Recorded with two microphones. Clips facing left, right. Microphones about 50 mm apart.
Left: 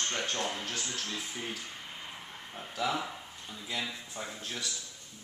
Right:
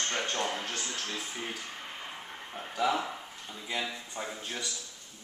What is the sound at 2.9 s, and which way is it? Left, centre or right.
Speech, centre.